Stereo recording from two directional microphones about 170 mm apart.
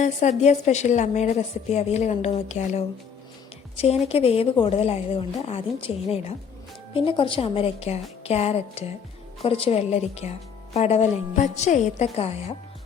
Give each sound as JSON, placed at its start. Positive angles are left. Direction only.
{"t": 0.0, "sound": "a woman's voice", "side_deg": 45}